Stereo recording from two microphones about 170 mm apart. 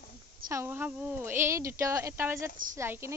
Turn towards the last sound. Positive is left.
turn(degrees=-15)  # may be behind; listen again after turning